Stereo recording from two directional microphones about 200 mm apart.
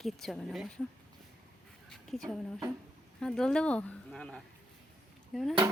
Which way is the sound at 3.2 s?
5° left (ahead or behind).